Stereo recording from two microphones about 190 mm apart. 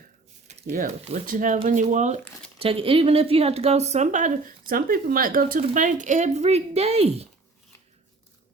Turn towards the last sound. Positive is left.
turn(degrees=-30)  # may be behind; listen again after turning